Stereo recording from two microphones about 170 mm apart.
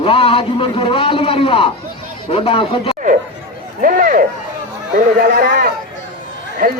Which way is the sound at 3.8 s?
55° right (ahead or behind).